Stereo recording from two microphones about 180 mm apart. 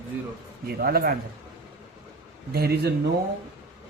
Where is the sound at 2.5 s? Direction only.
60° right (ahead or behind).